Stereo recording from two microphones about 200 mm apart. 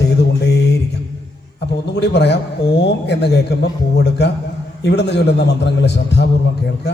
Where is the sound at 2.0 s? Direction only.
60° left (ahead or behind).